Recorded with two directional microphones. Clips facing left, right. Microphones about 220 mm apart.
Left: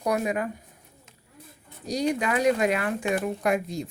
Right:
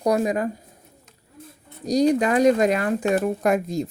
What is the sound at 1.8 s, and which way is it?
Speech, 40° right (ahead or behind).